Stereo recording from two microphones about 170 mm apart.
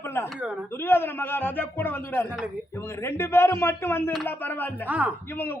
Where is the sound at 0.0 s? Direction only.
15° left (ahead or behind).